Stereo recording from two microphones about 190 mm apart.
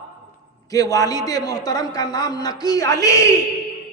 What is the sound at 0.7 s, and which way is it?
A man's voice, 20° left (ahead or behind).